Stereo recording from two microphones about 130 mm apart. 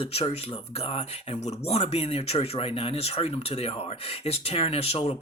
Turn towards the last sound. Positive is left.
turn(degrees=50)  # may be behind; listen again after turning